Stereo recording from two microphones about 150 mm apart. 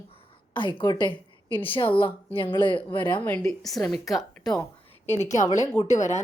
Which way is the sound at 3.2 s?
10° left (ahead or behind).